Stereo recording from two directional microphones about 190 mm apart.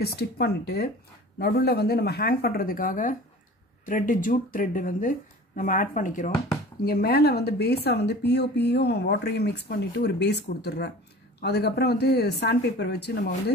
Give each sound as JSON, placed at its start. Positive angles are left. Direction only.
{"t": 0.0, "sound": "speech", "side_deg": 55}
{"t": 6.8, "sound": "speech", "side_deg": 55}